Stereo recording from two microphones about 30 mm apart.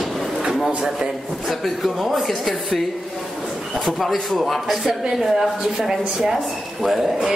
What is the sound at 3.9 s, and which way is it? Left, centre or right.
A man's voice, centre.